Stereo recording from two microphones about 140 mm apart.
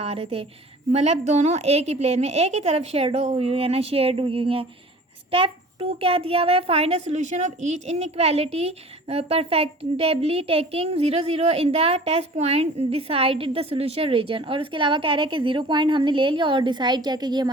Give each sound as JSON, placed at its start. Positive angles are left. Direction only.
{"t": 0.0, "sound": "a woman's voice", "side_deg": -45}